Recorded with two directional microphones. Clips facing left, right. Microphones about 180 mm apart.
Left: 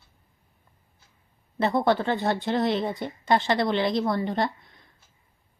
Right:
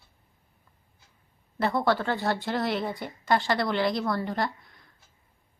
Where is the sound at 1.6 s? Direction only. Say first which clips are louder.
Left 3 dB; 20° left (ahead or behind).